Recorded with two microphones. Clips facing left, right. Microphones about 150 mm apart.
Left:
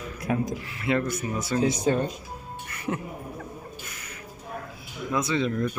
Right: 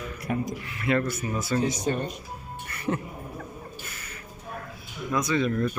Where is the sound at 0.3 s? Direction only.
90° left.